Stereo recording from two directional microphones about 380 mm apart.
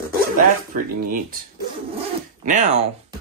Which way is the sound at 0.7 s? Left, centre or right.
Right.